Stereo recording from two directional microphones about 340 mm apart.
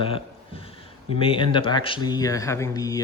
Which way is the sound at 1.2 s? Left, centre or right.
Centre.